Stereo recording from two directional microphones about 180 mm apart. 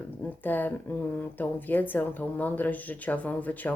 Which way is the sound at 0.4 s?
10° left (ahead or behind).